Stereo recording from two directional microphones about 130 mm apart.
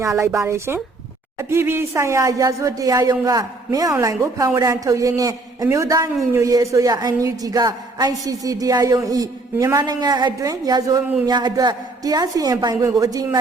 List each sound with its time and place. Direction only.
0.0 s a woman's voice: 20° right (ahead or behind)